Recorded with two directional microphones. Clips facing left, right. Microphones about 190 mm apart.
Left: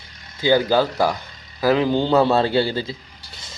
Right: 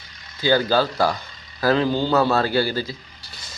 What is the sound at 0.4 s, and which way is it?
A man's voice, 15° left (ahead or behind).